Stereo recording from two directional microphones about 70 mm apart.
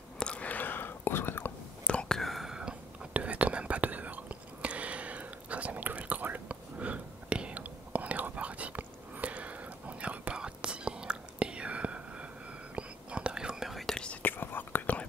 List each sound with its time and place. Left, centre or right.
0.2 s whispering: centre
1.9 s whispering: centre
3.1 s whispering: right; by 13.9 s centre
14.2 s whispering: left